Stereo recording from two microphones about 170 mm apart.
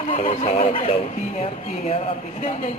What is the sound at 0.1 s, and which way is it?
Speech, 40° left (ahead or behind).